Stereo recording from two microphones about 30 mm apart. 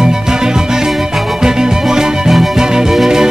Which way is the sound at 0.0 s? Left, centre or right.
Right.